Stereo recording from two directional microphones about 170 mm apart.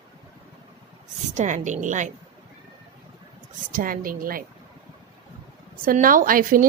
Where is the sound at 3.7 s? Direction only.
55° right (ahead or behind).